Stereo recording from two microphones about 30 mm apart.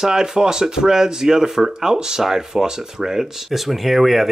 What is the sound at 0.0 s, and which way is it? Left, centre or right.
Speech, centre.